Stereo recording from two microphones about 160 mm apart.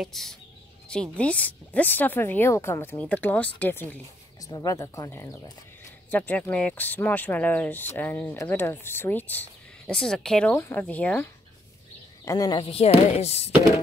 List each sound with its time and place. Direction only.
0.0 s speech: centre (ahead or behind)
4.4 s speech: 25° left (ahead or behind)
12.3 s speech: 25° left (ahead or behind)
12.7 s speech: 40° left (ahead or behind)